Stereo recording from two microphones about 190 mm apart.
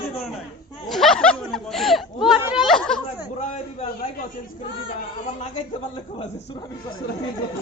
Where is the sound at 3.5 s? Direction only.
30° left (ahead or behind).